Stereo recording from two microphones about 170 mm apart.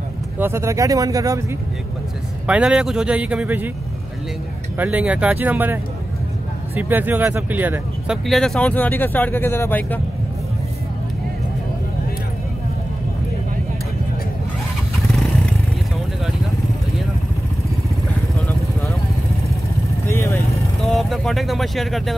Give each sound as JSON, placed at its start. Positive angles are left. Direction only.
{"t": 0.4, "sound": "speech", "side_deg": -15}
{"t": 2.4, "sound": "speech", "side_deg": -5}
{"t": 4.7, "sound": "speech", "side_deg": -10}
{"t": 8.3, "sound": "speech", "side_deg": 0}
{"t": 20.1, "sound": "vehicle", "side_deg": 15}
{"t": 20.8, "sound": "vehicle", "side_deg": 0}